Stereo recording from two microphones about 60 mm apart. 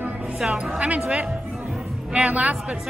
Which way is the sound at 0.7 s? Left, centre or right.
Right.